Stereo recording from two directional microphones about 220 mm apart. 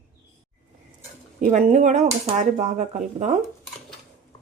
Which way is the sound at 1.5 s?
35° right (ahead or behind).